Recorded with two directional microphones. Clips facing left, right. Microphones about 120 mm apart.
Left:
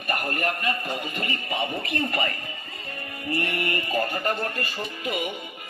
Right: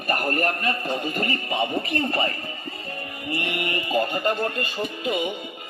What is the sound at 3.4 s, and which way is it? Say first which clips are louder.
Speech: even; 20° right (ahead or behind).